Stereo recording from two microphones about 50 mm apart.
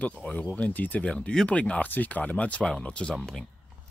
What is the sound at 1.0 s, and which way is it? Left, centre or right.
Speech, left.